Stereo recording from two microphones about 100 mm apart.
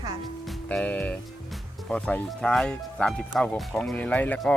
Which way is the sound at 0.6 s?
15° left (ahead or behind).